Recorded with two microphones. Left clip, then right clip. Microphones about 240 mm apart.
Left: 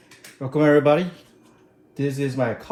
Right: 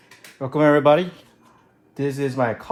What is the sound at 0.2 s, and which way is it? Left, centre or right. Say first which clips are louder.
Speech: right 2 dB; right.